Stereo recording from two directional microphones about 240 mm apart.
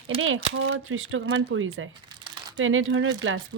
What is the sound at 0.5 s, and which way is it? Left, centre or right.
Speech, right.